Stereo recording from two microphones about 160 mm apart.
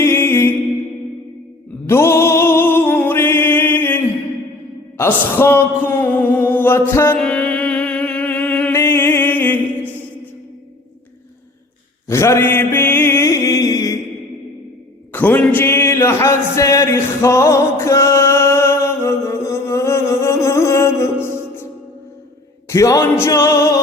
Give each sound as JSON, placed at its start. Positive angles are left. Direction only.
{"t": 0.0, "sound": "music", "side_deg": 15}
{"t": 1.9, "sound": "music", "side_deg": 15}
{"t": 4.9, "sound": "a sound", "side_deg": 15}
{"t": 12.0, "sound": "mantra", "side_deg": 15}
{"t": 15.1, "sound": "a sound", "side_deg": 10}
{"t": 22.7, "sound": "a man's voice", "side_deg": 20}
{"t": 23.2, "sound": "music", "side_deg": 15}